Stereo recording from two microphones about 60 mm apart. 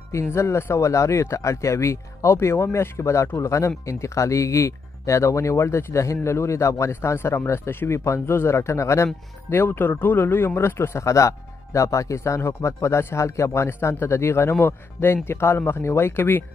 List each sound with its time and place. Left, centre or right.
0.1 s speech: left
6.9 s speech: left
12.4 s speech: left
13.7 s speech: left